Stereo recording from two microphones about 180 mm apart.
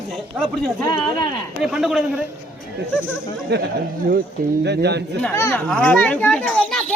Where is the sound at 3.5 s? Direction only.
70° right (ahead or behind).